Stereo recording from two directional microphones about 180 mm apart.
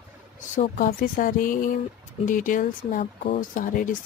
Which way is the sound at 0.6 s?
50° left (ahead or behind).